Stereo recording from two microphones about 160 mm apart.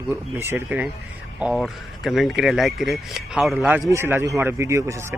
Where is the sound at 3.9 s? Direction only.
15° right (ahead or behind).